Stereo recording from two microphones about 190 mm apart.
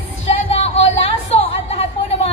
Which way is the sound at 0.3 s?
35° left (ahead or behind).